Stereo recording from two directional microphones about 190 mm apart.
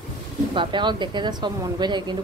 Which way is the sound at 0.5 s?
25° right (ahead or behind).